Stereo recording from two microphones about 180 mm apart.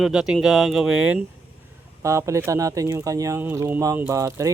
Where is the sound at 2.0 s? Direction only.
15° right (ahead or behind).